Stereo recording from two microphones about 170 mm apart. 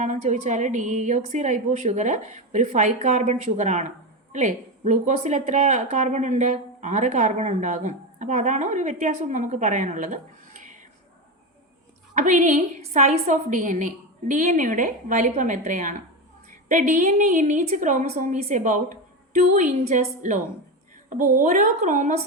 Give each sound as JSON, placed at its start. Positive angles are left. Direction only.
{"t": 0.0, "sound": "a woman's voice", "side_deg": -45}
{"t": 12.1, "sound": "a woman's voice", "side_deg": -45}